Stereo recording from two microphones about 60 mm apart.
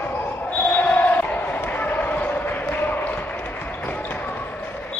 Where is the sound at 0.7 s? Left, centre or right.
Left.